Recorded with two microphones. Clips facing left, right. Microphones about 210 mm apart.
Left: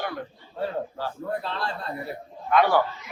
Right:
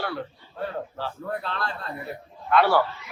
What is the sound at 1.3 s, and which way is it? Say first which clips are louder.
Speech: left 1 dB; 25° left (ahead or behind).